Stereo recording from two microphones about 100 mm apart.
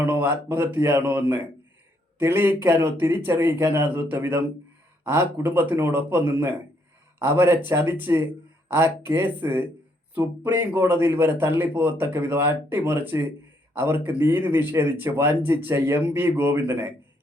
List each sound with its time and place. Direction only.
0.0 s speech: 20° right (ahead or behind)